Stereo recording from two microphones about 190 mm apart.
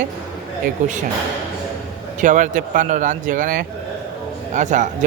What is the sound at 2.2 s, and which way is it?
Speech, 40° right (ahead or behind).